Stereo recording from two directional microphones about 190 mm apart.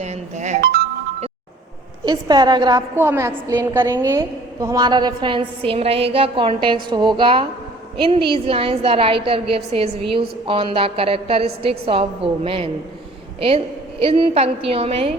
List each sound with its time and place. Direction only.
0.0 s a woman's voice: 35° right (ahead or behind)
2.0 s a woman's voice: 20° right (ahead or behind)
2.9 s a woman's voice: 10° right (ahead or behind); by 12.7 s 30° right (ahead or behind)
14.0 s a woman's voice: 30° right (ahead or behind)